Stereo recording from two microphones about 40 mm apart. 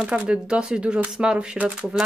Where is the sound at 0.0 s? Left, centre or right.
Right.